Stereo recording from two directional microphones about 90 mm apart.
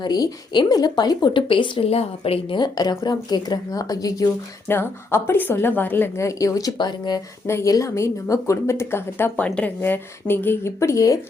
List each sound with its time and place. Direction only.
0.0 s speech: 50° left (ahead or behind); by 2.6 s 90° left
2.6 s speech: 50° left (ahead or behind)
4.7 s speech: 25° left (ahead or behind); by 6.7 s 40° left (ahead or behind)
6.7 s speech: 55° left (ahead or behind)
7.4 s speech: 30° left (ahead or behind)